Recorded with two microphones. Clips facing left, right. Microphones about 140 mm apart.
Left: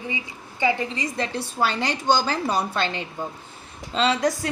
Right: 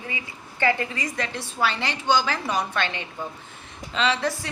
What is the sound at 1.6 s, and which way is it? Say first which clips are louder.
A woman's voice: left 2 dB; 40° left (ahead or behind).